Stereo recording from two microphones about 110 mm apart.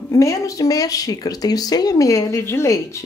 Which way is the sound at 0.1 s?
30° left (ahead or behind).